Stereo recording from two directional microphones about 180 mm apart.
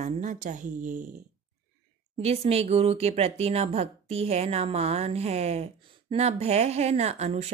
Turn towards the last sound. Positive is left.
turn(degrees=-35)  # may be behind; listen again after turning